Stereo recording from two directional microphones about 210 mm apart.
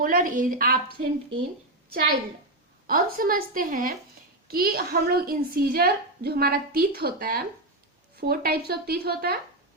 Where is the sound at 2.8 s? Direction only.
45° right (ahead or behind).